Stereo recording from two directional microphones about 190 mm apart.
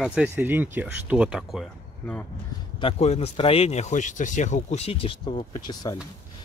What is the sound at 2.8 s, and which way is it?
A man's voice, 35° left (ahead or behind).